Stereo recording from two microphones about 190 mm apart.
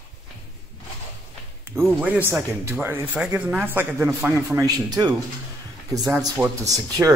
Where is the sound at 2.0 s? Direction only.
10° right (ahead or behind).